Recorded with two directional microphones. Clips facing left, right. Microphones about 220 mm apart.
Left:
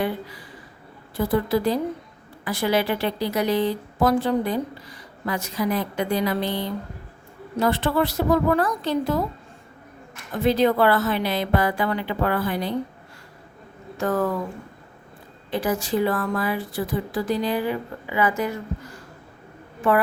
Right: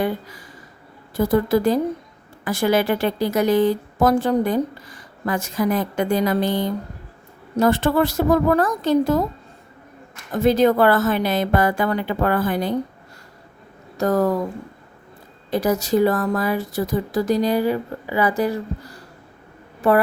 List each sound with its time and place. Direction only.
0.0 s a woman's voice: 45° right (ahead or behind)
10.3 s a woman's voice: 45° right (ahead or behind)
13.9 s speech: 40° right (ahead or behind)
15.4 s a woman's voice: 40° right (ahead or behind)